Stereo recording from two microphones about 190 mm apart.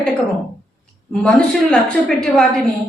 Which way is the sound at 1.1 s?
5° left (ahead or behind).